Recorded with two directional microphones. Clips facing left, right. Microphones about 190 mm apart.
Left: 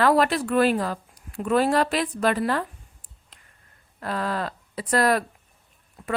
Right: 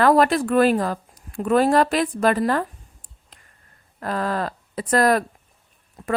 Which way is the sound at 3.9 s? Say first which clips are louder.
Right 3 dB; 45° right (ahead or behind).